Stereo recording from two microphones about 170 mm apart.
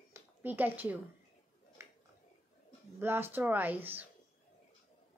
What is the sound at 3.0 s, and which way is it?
Speech, 15° right (ahead or behind).